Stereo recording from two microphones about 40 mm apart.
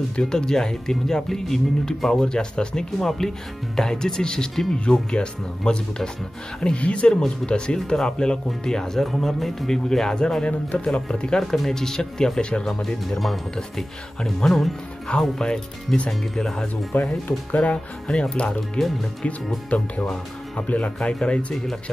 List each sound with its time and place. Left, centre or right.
0.2 s speech: centre
3.0 s speech: centre
10.7 s speech: left
11.3 s speech: centre; by 12.6 s left
12.6 s speech: centre
16.9 s speech: left
17.6 s speech: left
19.7 s speech: left
21.0 s speech: left